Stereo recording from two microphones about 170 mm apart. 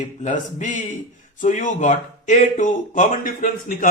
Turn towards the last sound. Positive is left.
turn(degrees=50)  # may be behind; listen again after turning